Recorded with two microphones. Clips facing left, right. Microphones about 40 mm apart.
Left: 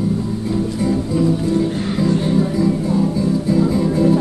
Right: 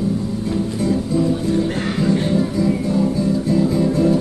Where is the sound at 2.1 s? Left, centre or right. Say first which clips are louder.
Left 1 dB; centre.